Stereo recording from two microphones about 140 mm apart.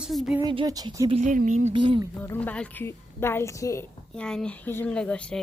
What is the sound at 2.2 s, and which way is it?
A woman's voice, 10° left (ahead or behind).